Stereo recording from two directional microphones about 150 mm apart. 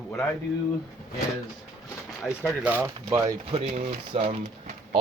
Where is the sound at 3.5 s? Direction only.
40° right (ahead or behind).